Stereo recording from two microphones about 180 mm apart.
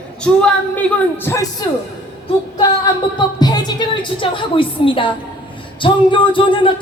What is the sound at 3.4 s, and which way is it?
A woman's voice, 20° left (ahead or behind).